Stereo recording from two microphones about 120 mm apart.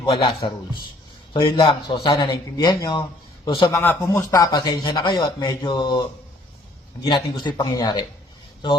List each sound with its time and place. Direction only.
0.0 s a man's voice: 50° left (ahead or behind)
3.7 s speech: 20° left (ahead or behind); by 6.0 s 40° left (ahead or behind)
7.1 s speech: 40° left (ahead or behind)